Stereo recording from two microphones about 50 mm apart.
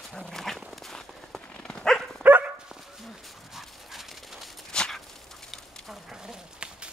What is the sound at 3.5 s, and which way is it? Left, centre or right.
Dog, centre.